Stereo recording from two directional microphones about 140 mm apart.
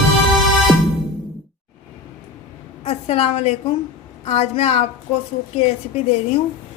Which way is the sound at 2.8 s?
45° left (ahead or behind).